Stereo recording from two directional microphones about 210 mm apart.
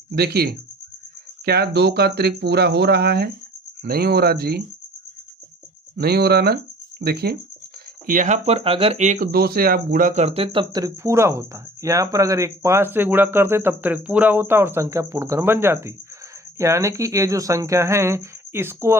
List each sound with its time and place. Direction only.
0.2 s speech: 50° right (ahead or behind)
6.0 s speech: 50° right (ahead or behind); by 18.9 s 10° right (ahead or behind)